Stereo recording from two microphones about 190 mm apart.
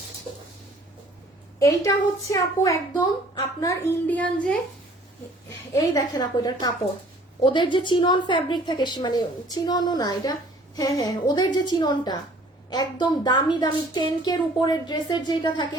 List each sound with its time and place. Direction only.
1.5 s a woman's voice: 20° left (ahead or behind)
5.7 s a woman's voice: 20° left (ahead or behind)